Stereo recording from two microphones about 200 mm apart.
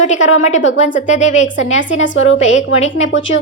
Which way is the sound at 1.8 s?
70° left (ahead or behind).